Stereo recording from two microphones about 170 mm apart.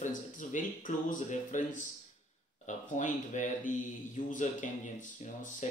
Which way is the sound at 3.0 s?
45° left (ahead or behind).